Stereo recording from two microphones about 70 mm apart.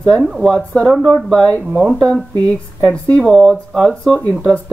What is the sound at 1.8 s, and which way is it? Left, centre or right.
Speech, centre.